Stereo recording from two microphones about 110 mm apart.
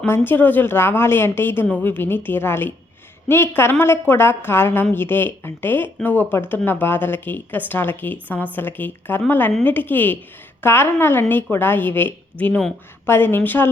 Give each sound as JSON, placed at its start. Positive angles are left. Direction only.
{"t": 0.0, "sound": "a woman's voice", "side_deg": 20}